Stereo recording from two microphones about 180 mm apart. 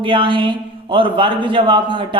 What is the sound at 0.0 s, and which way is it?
A man's voice, 30° right (ahead or behind).